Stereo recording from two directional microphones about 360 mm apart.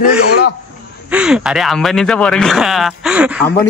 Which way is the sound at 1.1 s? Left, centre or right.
Centre.